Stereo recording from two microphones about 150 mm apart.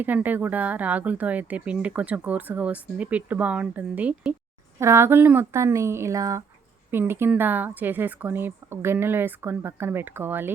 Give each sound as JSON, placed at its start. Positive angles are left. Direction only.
{"t": 0.0, "sound": "speech", "side_deg": -10}